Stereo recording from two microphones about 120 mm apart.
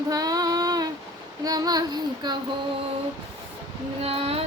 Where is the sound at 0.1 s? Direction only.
30° right (ahead or behind).